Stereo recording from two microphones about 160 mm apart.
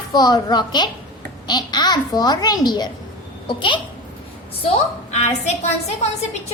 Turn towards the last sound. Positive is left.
turn(degrees=40)  # may be behind; listen again after turning